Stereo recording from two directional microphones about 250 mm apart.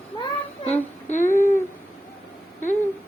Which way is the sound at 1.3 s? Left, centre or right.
Centre.